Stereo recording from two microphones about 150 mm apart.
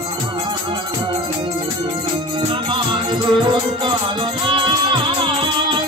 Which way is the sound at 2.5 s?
35° right (ahead or behind).